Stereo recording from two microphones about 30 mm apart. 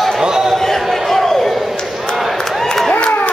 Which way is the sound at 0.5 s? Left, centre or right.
Centre.